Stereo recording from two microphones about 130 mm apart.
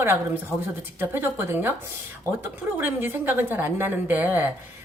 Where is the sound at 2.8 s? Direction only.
15° right (ahead or behind).